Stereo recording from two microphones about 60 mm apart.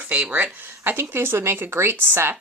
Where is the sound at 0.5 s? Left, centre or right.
Right.